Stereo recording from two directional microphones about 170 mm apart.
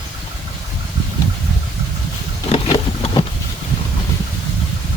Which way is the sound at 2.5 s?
35° left (ahead or behind).